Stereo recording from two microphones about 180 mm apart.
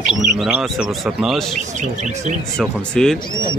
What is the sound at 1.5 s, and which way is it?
Speech, 40° right (ahead or behind).